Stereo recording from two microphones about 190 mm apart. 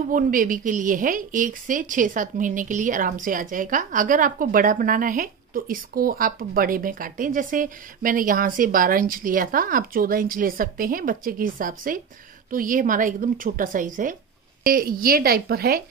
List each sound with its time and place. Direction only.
0.1 s a woman's voice: 45° right (ahead or behind)